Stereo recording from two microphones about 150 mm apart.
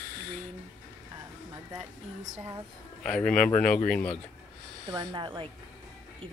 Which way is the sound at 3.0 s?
5° left (ahead or behind).